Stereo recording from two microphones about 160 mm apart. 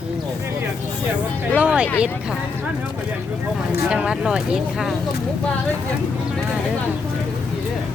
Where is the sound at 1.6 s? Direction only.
10° right (ahead or behind).